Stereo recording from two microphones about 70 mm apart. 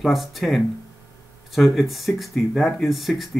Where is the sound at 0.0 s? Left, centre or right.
Centre.